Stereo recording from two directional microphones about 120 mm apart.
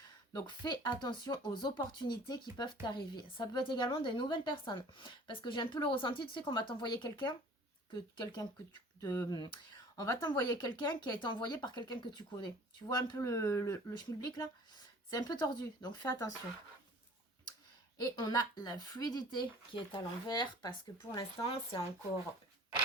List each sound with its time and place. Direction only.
0.3 s a woman's voice: 35° left (ahead or behind)
9.0 s a woman's voice: 25° left (ahead or behind)
17.9 s a woman's voice: 35° left (ahead or behind)
21.2 s speech: 50° left (ahead or behind)